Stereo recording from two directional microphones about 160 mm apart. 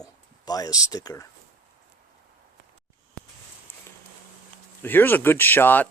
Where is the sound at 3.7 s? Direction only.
10° left (ahead or behind).